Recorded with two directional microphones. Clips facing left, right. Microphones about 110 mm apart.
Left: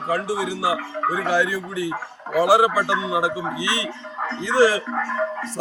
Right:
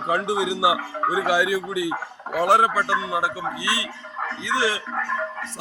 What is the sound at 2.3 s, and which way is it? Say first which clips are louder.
Speech: left 2 dB; 5° left (ahead or behind).